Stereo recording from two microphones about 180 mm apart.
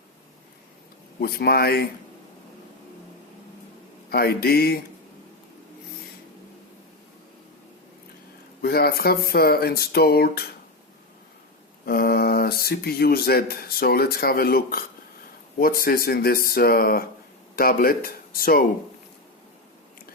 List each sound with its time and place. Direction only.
1.2 s speech: 60° left (ahead or behind)
4.1 s speech: 60° left (ahead or behind)
8.6 s speech: 60° left (ahead or behind)
11.9 s speech: 60° left (ahead or behind)